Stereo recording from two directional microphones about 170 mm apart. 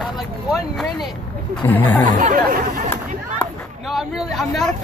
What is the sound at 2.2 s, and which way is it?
Speech, 50° right (ahead or behind).